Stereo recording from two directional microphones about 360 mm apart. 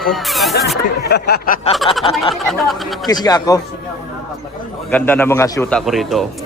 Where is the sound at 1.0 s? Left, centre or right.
Left.